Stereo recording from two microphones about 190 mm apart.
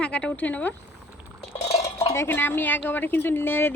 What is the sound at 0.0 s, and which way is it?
Speech, 5° left (ahead or behind).